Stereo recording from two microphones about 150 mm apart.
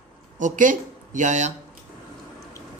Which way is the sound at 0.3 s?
60° right (ahead or behind).